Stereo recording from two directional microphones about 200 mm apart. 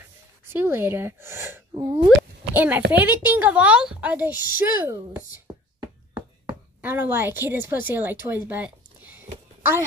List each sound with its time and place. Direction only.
0.5 s a woman's voice: 10° right (ahead or behind)
2.0 s a woman's voice: 10° right (ahead or behind)
5.8 s chopping: 20° right (ahead or behind)
6.8 s a woman's voice: 10° right (ahead or behind)